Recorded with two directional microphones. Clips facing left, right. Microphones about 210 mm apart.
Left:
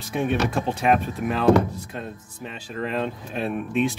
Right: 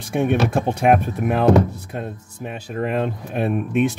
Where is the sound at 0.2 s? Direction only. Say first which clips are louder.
Right 4 dB; 50° right (ahead or behind).